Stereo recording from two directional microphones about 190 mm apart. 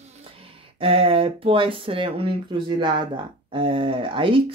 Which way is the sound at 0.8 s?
30° right (ahead or behind).